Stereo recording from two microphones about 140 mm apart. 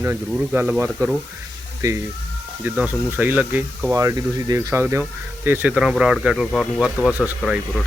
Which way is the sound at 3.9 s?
25° right (ahead or behind).